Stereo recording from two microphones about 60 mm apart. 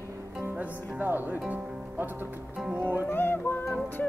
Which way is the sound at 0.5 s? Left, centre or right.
Right.